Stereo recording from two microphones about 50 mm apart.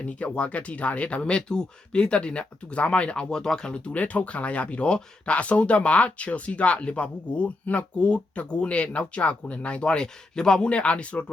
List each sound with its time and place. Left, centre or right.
0.0 s speech: left
3.9 s speech: left